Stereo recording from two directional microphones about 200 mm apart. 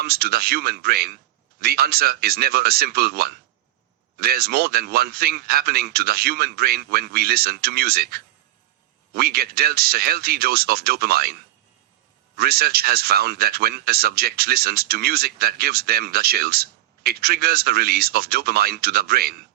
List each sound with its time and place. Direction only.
0.0 s speech: 50° right (ahead or behind)
12.4 s speech: 50° right (ahead or behind)